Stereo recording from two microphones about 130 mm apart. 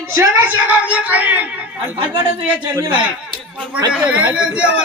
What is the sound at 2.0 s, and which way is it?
Speech, 40° right (ahead or behind).